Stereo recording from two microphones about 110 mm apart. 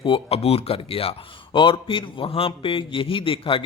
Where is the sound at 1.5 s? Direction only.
45° left (ahead or behind).